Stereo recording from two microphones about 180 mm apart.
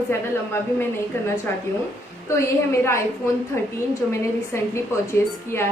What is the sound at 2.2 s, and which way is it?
Speech, 15° left (ahead or behind).